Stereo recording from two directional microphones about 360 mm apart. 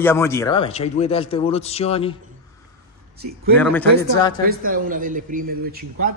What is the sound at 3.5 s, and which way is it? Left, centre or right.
Speech, centre.